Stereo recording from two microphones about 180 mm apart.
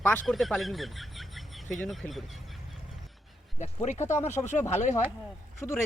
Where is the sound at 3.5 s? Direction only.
40° left (ahead or behind).